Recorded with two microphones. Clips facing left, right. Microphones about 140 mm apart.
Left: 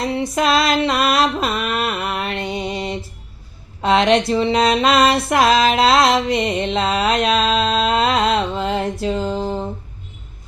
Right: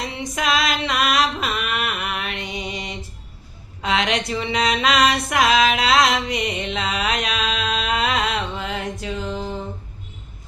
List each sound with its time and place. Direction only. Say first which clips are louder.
0.2 s a sound: left 4 dB; 35° left (ahead or behind)
2.4 s music: left 6 dB; 50° left (ahead or behind)
3.8 s music: left 7 dB; 35° left (ahead or behind)